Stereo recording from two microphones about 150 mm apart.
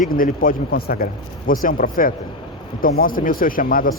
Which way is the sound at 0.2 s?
70° left (ahead or behind).